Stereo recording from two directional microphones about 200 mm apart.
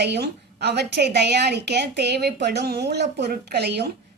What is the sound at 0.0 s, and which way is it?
A woman's voice, 55° right (ahead or behind).